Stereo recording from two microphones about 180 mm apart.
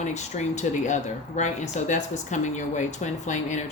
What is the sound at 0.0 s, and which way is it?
Speech, 40° left (ahead or behind).